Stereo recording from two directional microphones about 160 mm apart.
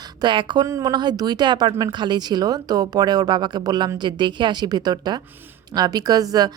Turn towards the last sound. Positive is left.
turn(degrees=-25)  # may be behind; listen again after turning